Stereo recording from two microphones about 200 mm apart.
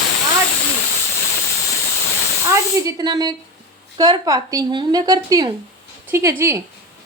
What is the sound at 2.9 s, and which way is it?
A woman's voice, 20° right (ahead or behind).